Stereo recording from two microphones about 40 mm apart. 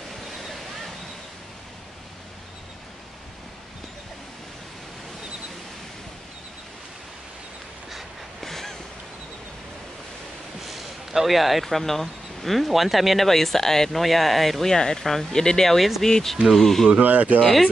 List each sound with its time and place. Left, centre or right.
0.3 s waves: centre
7.9 s a sound: centre
10.6 s a sound: centre
11.6 s speech: centre
17.0 s speech: right
17.4 s speech: centre